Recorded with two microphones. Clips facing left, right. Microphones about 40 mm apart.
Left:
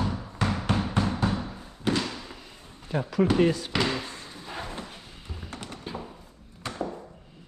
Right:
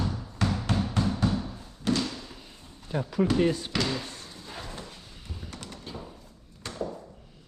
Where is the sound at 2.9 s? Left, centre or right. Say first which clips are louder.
Left 2 dB; left.